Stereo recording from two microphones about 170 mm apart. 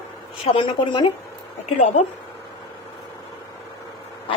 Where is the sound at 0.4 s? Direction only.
30° left (ahead or behind).